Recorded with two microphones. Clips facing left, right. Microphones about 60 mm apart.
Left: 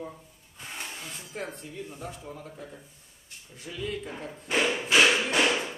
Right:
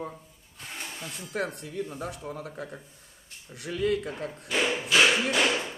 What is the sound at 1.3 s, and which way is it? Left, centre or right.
Speech, right.